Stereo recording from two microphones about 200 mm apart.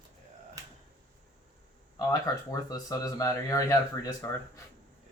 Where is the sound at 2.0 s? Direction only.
15° left (ahead or behind).